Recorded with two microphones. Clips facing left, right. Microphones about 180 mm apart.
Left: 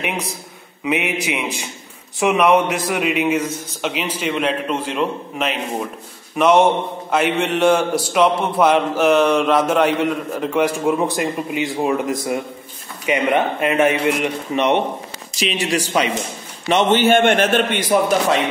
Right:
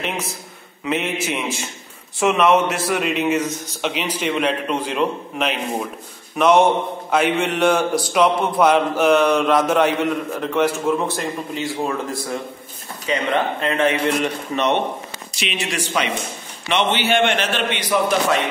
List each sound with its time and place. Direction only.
0.8 s a man's voice: 15° left (ahead or behind)
15.3 s a man's voice: 35° left (ahead or behind)